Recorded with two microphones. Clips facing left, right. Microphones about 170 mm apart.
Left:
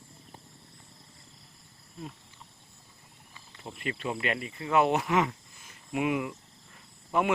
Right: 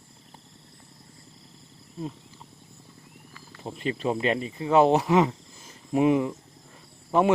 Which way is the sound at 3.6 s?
30° right (ahead or behind).